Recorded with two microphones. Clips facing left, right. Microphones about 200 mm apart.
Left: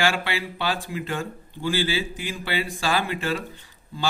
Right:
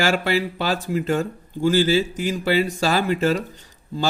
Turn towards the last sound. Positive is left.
turn(degrees=-40)  # may be behind; listen again after turning